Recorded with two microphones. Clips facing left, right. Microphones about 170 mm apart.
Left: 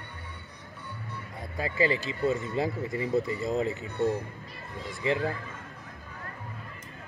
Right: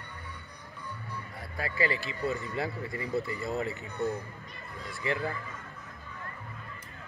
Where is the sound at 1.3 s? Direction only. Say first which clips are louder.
Left 4 dB; 20° left (ahead or behind).